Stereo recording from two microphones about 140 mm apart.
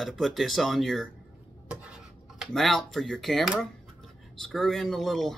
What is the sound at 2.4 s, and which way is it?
Speech, centre (ahead or behind).